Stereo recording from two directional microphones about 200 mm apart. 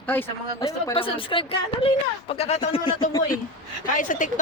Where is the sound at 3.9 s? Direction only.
40° left (ahead or behind).